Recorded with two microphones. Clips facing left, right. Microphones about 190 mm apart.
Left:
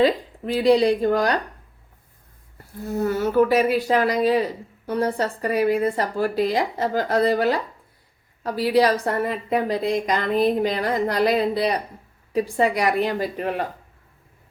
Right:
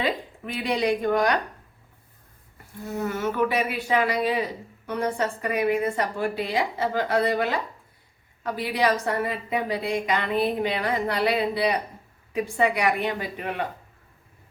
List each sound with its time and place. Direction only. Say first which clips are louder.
0.0 s a woman's voice: left 8 dB; 35° left (ahead or behind)
3.0 s a woman's voice: left 6 dB; 35° left (ahead or behind)